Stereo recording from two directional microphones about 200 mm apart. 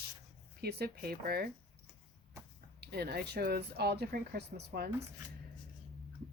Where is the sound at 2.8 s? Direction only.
55° right (ahead or behind).